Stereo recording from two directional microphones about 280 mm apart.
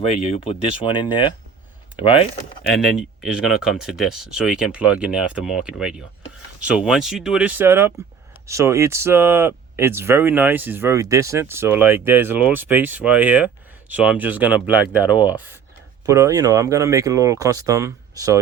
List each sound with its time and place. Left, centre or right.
0.1 s speech: centre
3.2 s speech: centre